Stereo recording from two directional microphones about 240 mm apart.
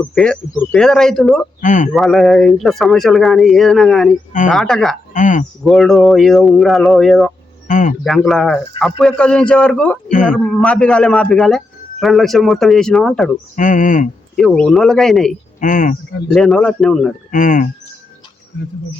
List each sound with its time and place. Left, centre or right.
0.1 s a man's voice: centre
1.6 s speech: left
1.9 s a man's voice: centre
5.1 s speech: left
5.6 s a man's voice: centre
7.7 s speech: left
8.0 s a man's voice: centre
10.1 s speech: left
10.3 s a man's voice: centre
13.6 s speech: left
14.3 s a man's voice: centre
15.6 s speech: left
16.3 s a man's voice: centre
17.3 s speech: left